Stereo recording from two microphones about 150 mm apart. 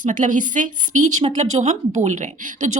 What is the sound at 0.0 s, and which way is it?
A woman's voice, 60° right (ahead or behind).